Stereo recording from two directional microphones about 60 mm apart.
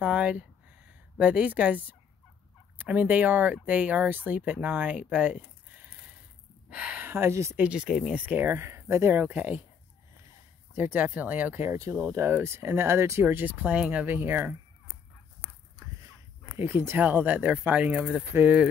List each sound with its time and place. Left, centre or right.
0.0 s speech: centre
7.0 s speech: right
7.5 s speech: right
7.8 s speech: centre
8.1 s speech: right
8.5 s speech: right
10.7 s speech: right
11.6 s speech: right
12.3 s speech: right
16.5 s speech: right
17.0 s speech: right